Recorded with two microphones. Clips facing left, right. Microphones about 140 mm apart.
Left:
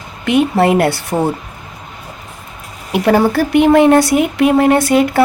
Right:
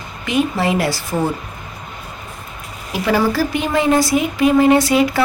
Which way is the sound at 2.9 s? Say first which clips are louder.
Left 5 dB; 60° left (ahead or behind).